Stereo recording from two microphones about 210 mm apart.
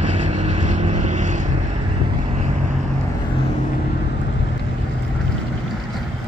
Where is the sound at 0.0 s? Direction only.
35° right (ahead or behind).